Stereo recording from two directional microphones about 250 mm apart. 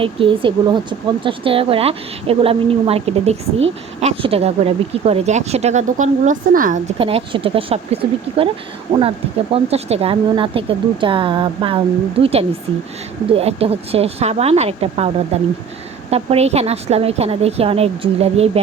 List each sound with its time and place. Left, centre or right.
0.0 s speech: right